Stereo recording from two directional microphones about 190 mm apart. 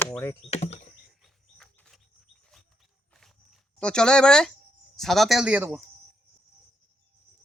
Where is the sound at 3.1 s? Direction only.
Centre (ahead or behind).